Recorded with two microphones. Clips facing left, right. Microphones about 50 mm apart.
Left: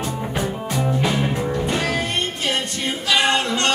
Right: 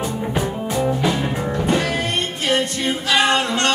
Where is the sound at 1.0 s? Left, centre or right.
Centre.